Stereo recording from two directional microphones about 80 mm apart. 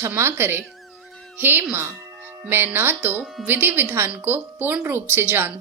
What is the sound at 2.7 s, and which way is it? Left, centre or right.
A woman's voice, right.